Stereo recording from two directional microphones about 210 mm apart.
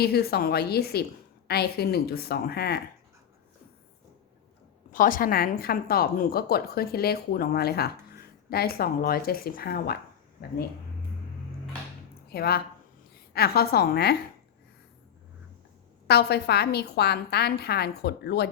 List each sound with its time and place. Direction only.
0.0 s a woman's voice: 50° left (ahead or behind)
4.9 s a woman's voice: 40° left (ahead or behind)
12.3 s a woman's voice: 45° left (ahead or behind)
16.0 s a woman's voice: 50° left (ahead or behind)